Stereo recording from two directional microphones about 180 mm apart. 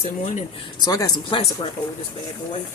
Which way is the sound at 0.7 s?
20° left (ahead or behind).